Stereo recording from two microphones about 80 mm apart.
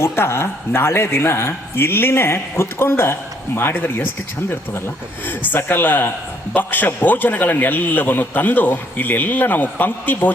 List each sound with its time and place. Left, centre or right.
0.0 s speech: left
5.4 s speech: left